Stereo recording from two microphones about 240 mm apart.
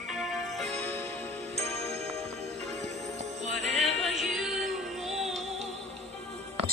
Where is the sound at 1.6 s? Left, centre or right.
Right.